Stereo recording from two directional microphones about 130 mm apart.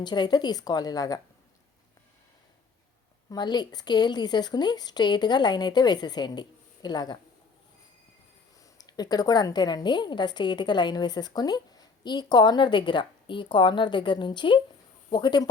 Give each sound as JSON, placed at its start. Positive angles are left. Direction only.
{"t": 0.0, "sound": "a woman's voice", "side_deg": 35}
{"t": 3.2, "sound": "a woman's voice", "side_deg": 35}
{"t": 8.8, "sound": "a woman's voice", "side_deg": 30}